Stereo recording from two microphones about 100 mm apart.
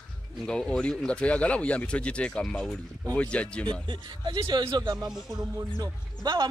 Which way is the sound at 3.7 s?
50° right (ahead or behind).